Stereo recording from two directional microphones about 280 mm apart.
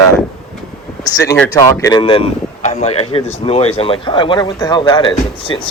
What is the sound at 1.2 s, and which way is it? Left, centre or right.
Speech, centre.